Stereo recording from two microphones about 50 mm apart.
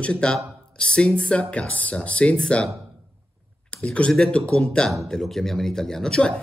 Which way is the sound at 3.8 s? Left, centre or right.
Left.